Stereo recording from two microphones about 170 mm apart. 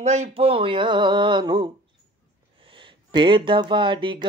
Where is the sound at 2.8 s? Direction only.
30° right (ahead or behind).